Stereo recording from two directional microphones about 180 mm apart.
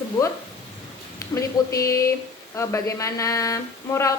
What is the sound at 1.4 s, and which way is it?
A woman's voice, 15° left (ahead or behind).